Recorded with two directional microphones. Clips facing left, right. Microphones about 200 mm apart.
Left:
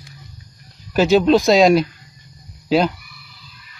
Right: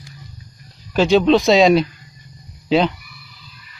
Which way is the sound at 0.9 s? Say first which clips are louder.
Even; 5° left (ahead or behind).